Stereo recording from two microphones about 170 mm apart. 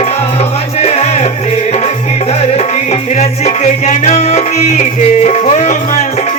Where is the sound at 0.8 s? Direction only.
40° left (ahead or behind).